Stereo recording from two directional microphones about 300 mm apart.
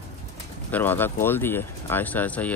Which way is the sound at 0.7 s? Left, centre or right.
Centre.